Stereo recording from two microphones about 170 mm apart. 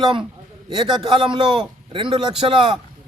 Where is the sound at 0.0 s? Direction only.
30° right (ahead or behind).